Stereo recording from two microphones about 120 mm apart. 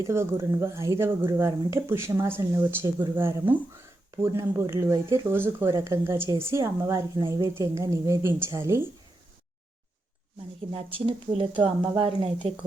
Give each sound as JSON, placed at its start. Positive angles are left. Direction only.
{"t": 0.1, "sound": "speech", "side_deg": -20}
{"t": 6.2, "sound": "a woman's voice", "side_deg": -40}
{"t": 6.5, "sound": "speech", "side_deg": -25}
{"t": 10.7, "sound": "a woman's voice", "side_deg": -50}